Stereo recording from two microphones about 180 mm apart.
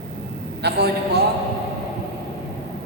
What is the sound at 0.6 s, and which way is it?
Speech, 70° right (ahead or behind).